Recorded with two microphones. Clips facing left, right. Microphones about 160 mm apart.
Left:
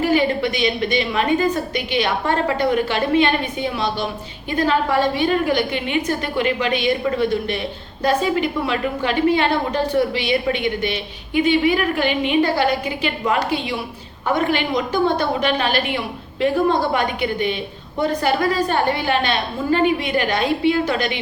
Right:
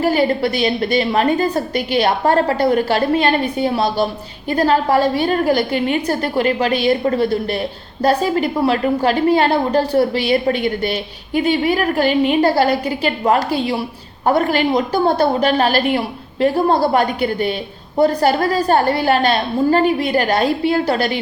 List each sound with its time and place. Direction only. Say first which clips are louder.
0.0 s a woman's voice: right 2 dB; 40° right (ahead or behind)